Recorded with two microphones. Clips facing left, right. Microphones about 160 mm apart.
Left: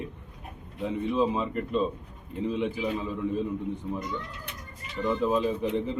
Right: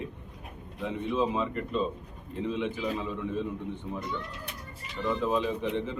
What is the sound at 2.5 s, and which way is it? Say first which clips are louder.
Speech: left 2 dB; 35° left (ahead or behind).